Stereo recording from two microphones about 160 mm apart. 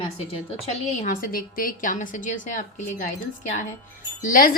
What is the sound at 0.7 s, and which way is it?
A woman's voice, 50° left (ahead or behind).